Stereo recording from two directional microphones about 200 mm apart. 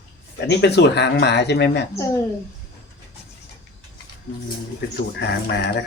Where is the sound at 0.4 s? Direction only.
60° left (ahead or behind).